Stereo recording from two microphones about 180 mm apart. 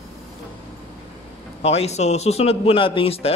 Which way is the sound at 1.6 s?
35° left (ahead or behind).